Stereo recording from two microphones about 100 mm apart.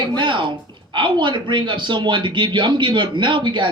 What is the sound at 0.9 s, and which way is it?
A man's voice, 50° right (ahead or behind).